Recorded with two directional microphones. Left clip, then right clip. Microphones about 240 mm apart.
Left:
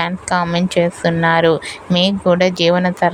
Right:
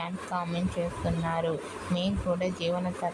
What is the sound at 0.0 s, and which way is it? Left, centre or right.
A woman's voice, left.